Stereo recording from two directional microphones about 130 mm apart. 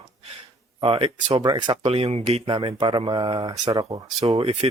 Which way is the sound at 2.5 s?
40° right (ahead or behind).